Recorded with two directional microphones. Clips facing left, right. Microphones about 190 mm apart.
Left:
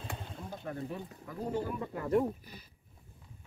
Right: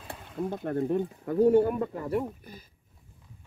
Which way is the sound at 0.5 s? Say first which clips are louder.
Right 11 dB; 55° right (ahead or behind).